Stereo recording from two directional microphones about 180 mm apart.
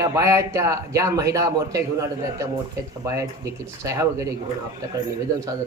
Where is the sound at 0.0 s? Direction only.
15° right (ahead or behind).